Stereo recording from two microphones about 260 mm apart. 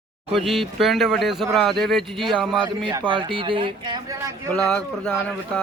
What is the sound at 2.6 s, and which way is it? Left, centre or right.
Speech, centre.